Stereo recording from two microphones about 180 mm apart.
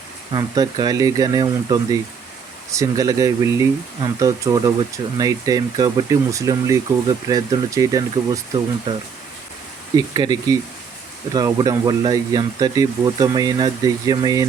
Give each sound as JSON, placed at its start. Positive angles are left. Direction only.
{"t": 0.3, "sound": "speech", "side_deg": -20}